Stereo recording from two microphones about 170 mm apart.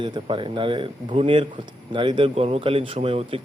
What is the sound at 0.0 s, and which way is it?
A man's voice, 30° right (ahead or behind).